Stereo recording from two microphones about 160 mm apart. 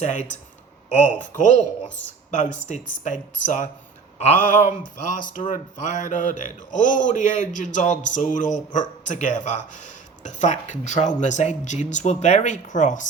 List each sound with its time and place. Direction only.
0.0 s speech: 50° left (ahead or behind)
4.2 s a sound: 55° left (ahead or behind)
5.0 s speech: 55° left (ahead or behind)